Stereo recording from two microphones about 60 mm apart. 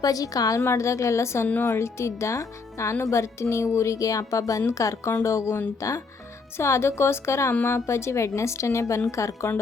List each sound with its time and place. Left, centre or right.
0.0 s a woman's voice: left
6.6 s a woman's voice: left